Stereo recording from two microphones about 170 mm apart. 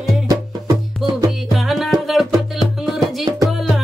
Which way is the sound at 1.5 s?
Centre (ahead or behind).